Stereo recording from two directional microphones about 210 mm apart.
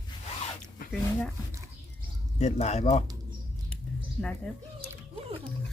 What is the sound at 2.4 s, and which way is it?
Speech, 30° left (ahead or behind).